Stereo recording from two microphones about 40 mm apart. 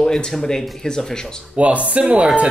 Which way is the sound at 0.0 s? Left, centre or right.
Centre.